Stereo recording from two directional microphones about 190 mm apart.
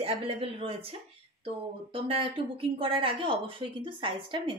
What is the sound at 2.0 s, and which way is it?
A woman's voice, 30° right (ahead or behind).